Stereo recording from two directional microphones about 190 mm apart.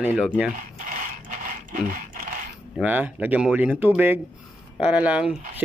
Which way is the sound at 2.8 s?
5° right (ahead or behind).